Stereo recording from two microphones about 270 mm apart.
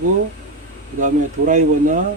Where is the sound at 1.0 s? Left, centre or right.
Right.